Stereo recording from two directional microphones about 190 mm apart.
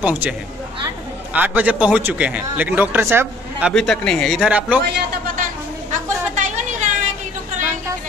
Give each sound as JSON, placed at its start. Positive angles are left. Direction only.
{"t": 0.0, "sound": "a man's voice", "side_deg": -5}
{"t": 1.3, "sound": "a man's voice", "side_deg": -10}
{"t": 3.7, "sound": "a man's voice", "side_deg": 5}
{"t": 4.8, "sound": "a sound", "side_deg": -50}